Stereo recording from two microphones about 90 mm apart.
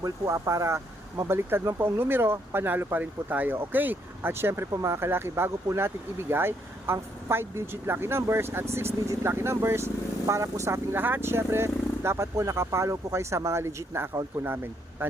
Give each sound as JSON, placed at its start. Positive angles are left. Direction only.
{"t": 0.0, "sound": "speech", "side_deg": -35}